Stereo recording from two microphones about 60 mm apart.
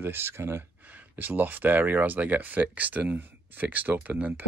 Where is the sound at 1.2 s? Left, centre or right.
Right.